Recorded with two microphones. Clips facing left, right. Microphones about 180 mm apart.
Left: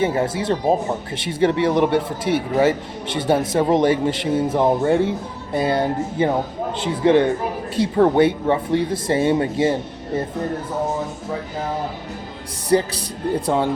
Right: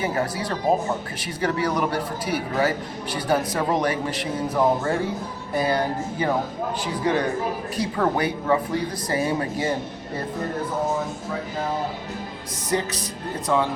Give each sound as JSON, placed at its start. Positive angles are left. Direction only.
{"t": 0.0, "sound": "speech", "side_deg": 25}
{"t": 12.7, "sound": "music", "side_deg": 35}